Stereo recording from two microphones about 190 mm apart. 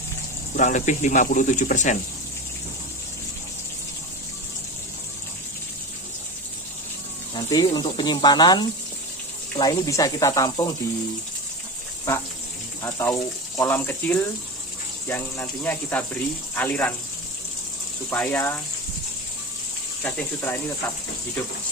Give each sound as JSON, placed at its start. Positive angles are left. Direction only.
{"t": 0.5, "sound": "speech", "side_deg": 40}
{"t": 7.3, "sound": "speech", "side_deg": 20}
{"t": 12.8, "sound": "speech", "side_deg": 10}
{"t": 18.1, "sound": "speech", "side_deg": 10}
{"t": 20.0, "sound": "speech", "side_deg": 10}